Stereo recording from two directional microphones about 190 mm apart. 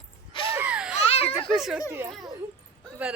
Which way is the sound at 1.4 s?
Centre (ahead or behind).